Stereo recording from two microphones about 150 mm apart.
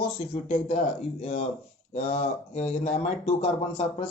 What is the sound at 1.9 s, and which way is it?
A man's voice, 45° left (ahead or behind).